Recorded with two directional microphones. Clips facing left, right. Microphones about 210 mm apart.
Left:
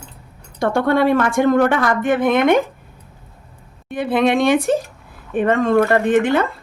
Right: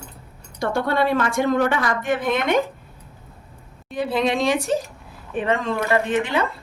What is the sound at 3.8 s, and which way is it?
A woman's voice, 55° left (ahead or behind).